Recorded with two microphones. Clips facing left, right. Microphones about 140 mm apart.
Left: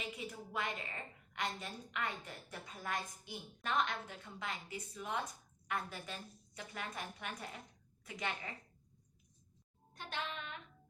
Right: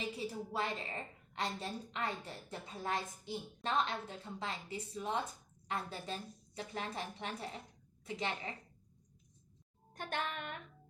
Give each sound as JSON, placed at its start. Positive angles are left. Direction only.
{"t": 0.2, "sound": "a woman's voice", "side_deg": -30}
{"t": 9.9, "sound": "music", "side_deg": -50}